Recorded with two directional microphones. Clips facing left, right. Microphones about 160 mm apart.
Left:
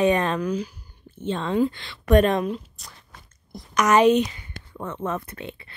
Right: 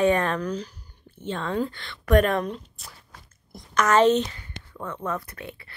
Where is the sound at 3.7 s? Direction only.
15° left (ahead or behind).